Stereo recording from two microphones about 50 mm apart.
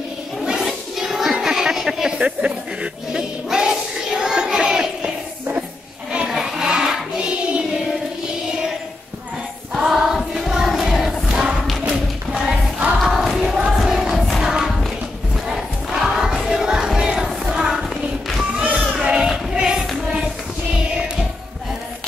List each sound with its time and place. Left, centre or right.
0.4 s a sound: centre
6.2 s child singing: centre
9.8 s music: centre
11.9 s a sound: centre
13.0 s choir: centre
13.7 s music: centre
14.1 s music: centre
14.4 s music: centre
15.4 s crowd: centre
18.9 s music: centre
19.5 s child singing: centre